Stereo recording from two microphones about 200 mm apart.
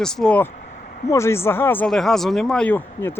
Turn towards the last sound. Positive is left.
turn(degrees=10)  # may be behind; listen again after turning